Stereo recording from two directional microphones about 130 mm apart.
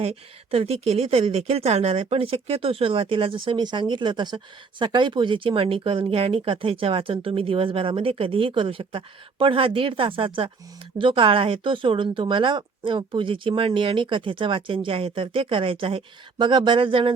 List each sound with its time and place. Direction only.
0.0 s speech: 50° right (ahead or behind)